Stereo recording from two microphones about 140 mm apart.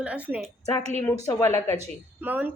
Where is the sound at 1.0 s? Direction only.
15° left (ahead or behind).